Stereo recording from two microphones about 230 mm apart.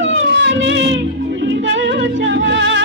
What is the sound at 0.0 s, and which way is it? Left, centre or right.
Music, right.